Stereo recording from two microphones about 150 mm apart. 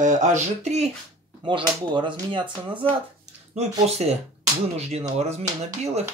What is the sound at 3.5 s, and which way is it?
Speech, 45° right (ahead or behind).